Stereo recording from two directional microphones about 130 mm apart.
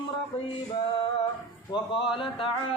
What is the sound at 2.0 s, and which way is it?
Speech, 40° left (ahead or behind).